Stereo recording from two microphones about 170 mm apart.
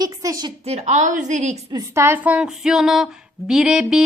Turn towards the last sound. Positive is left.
turn(degrees=-5)  # may be behind; listen again after turning